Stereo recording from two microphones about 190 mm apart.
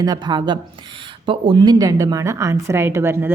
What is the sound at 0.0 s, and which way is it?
A woman's voice, 20° right (ahead or behind).